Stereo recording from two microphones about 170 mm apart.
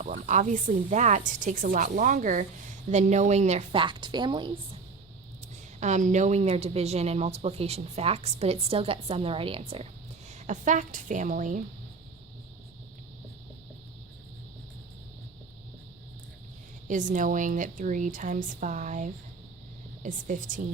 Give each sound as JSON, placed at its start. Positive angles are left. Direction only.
{"t": 0.2, "sound": "a woman's voice", "side_deg": -45}
{"t": 5.8, "sound": "a woman's voice", "side_deg": -45}
{"t": 16.9, "sound": "a woman's voice", "side_deg": -50}